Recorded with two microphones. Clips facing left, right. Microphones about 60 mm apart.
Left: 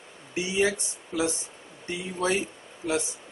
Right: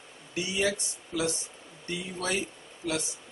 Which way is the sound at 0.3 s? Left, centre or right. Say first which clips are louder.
Left 4 dB; left.